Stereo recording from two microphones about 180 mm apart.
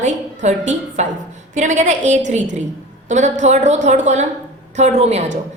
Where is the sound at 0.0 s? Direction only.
40° right (ahead or behind).